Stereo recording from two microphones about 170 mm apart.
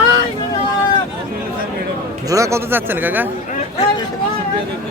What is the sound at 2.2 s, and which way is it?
Speech, 20° right (ahead or behind).